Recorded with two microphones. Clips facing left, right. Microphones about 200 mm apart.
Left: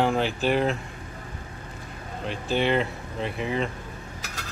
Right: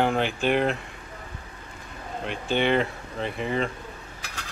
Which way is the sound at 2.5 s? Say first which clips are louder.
Right 1 dB; centre (ahead or behind).